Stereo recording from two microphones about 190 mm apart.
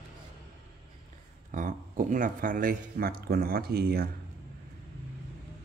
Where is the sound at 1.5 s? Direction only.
45° right (ahead or behind).